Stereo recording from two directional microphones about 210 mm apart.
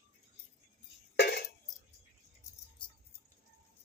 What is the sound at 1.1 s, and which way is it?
Tambourine, 50° left (ahead or behind).